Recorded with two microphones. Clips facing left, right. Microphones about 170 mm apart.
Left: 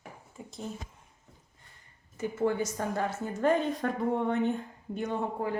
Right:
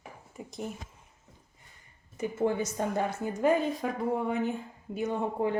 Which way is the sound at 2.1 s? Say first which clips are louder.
Even; 20° right (ahead or behind).